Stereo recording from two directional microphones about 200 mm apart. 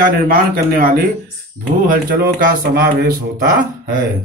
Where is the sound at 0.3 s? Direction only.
45° right (ahead or behind).